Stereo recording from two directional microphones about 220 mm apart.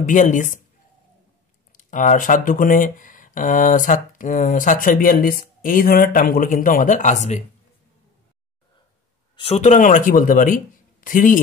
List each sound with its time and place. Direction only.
0.0 s speech: 35° left (ahead or behind)
1.7 s speech: 35° left (ahead or behind)
9.4 s speech: 30° left (ahead or behind)